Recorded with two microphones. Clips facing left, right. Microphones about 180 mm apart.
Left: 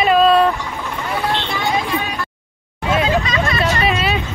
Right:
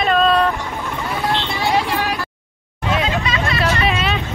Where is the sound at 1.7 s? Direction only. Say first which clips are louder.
Right 4 dB; 70° right (ahead or behind).